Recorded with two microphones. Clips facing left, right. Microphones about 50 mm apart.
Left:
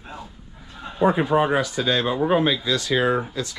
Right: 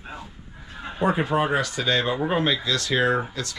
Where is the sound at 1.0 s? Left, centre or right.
Centre.